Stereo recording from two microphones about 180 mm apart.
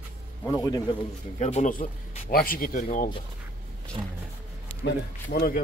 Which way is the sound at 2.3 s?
55° left (ahead or behind).